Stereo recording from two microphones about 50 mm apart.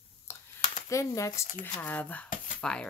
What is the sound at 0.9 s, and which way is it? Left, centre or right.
Speech, left.